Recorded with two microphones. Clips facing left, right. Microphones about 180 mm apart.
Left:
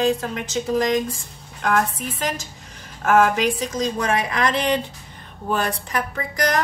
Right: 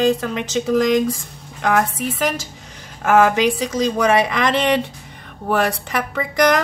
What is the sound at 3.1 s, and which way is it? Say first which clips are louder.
A woman's voice: right 3 dB; 85° right.